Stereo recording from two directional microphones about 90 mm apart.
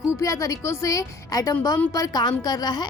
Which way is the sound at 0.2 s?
40° left (ahead or behind).